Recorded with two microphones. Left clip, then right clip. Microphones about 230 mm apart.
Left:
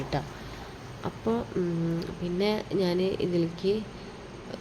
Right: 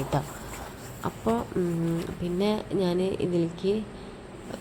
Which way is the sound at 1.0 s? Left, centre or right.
Centre.